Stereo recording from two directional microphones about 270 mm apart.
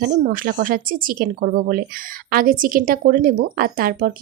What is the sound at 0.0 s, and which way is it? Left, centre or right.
Speech, right.